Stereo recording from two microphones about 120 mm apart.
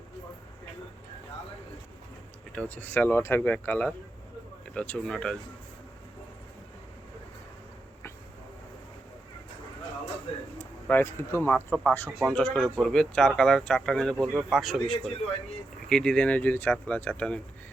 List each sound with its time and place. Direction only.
2.6 s speech: 15° left (ahead or behind)
10.6 s speech: 15° left (ahead or behind)